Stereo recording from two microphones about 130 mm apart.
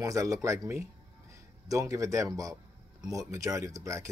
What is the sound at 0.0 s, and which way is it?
A man's voice, 25° right (ahead or behind).